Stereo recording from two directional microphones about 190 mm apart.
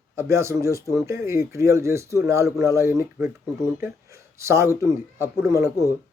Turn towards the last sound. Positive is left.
turn(degrees=-15)  # may be behind; listen again after turning